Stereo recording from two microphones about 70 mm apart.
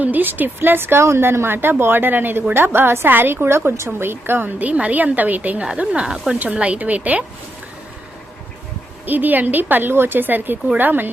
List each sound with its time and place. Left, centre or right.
0.0 s a woman's voice: right
9.0 s a woman's voice: right